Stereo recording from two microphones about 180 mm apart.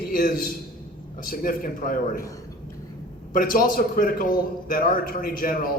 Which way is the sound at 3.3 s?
50° left (ahead or behind).